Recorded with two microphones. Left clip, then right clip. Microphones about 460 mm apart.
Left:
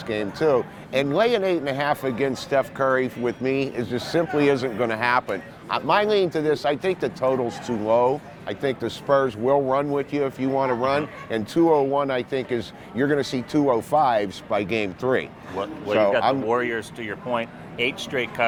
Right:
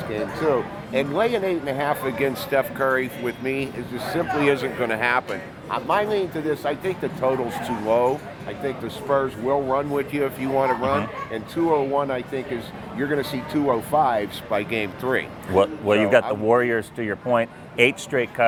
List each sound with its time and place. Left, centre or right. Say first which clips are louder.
0.1 s speech: left 2 dB; left
8.4 s speech: left 3 dB; left
9.9 s speech: even; left
15.5 s speech: right 4 dB; right